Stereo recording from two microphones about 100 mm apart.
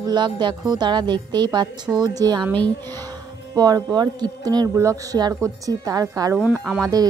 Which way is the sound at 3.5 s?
40° right (ahead or behind).